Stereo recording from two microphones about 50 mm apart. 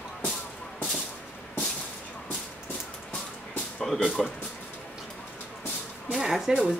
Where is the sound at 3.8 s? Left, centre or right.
Centre.